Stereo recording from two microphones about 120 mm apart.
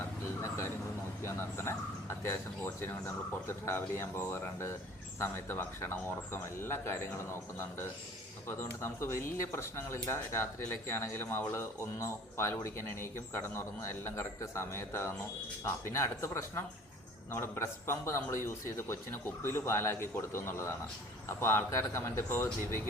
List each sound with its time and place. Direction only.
0.0 s a sound: 25° left (ahead or behind)
1.2 s speech: 20° left (ahead or behind)
3.4 s speech: 20° left (ahead or behind)